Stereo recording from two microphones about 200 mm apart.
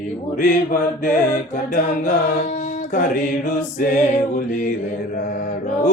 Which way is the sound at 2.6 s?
40° left (ahead or behind).